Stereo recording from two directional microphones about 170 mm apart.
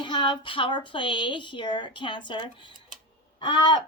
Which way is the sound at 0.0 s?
30° left (ahead or behind).